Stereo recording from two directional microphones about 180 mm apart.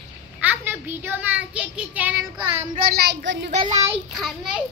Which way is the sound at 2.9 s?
65° right (ahead or behind).